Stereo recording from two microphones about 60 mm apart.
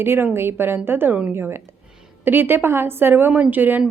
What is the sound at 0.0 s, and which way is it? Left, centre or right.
A woman's voice, right.